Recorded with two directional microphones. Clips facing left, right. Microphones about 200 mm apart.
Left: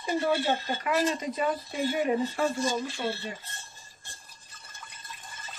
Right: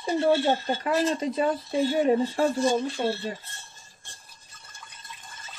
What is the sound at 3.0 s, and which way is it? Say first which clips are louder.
Speech: right 5 dB; 45° right (ahead or behind).